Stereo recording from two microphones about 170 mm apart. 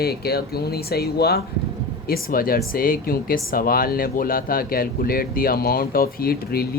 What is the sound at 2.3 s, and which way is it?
Speech, 60° left (ahead or behind).